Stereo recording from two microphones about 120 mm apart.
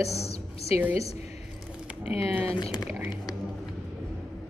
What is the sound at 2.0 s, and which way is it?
Speech, 55° left (ahead or behind).